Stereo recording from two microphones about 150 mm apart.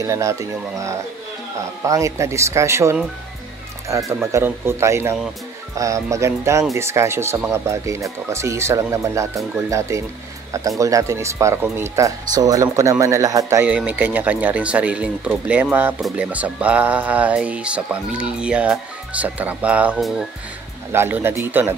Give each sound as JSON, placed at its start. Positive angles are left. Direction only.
{"t": 0.0, "sound": "speech", "side_deg": -20}
{"t": 4.1, "sound": "speech", "side_deg": -20}
{"t": 20.9, "sound": "speech", "side_deg": -15}